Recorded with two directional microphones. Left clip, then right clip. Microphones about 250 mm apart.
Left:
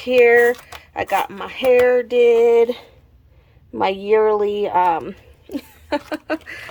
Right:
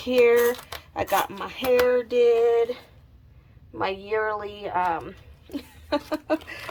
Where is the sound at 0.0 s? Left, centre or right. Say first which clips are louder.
Left 6 dB; centre.